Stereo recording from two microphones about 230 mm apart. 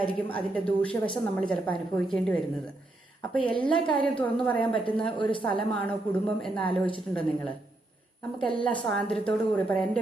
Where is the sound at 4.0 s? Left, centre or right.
Centre.